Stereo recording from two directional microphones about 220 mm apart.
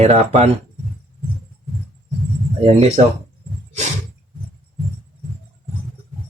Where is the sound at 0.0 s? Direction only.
30° right (ahead or behind).